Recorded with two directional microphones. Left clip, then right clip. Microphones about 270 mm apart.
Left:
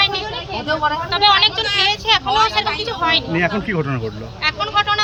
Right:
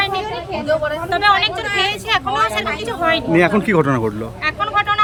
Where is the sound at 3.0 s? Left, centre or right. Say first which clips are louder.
Even; centre.